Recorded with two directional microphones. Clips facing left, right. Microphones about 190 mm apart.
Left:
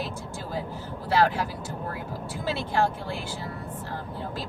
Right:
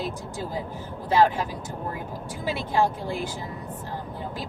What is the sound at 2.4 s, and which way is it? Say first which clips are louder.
Speech: right 2 dB; 15° right (ahead or behind).